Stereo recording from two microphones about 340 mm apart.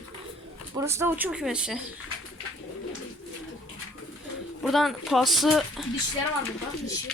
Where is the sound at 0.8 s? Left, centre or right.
Centre.